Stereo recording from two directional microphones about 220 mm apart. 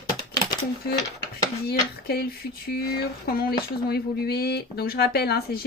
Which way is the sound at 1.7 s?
45° left (ahead or behind).